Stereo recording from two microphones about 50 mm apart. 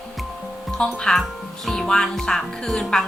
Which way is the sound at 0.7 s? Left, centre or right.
Centre.